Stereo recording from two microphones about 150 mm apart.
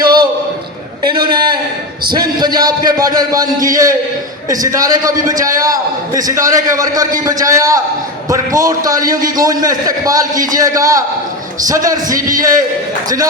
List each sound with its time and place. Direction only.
0.0 s a sound: 30° right (ahead or behind)
2.4 s a man's voice: 25° right (ahead or behind)
4.6 s a man's voice: 25° right (ahead or behind)